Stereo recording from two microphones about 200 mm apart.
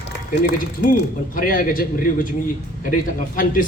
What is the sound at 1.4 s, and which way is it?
Speech, 45° left (ahead or behind).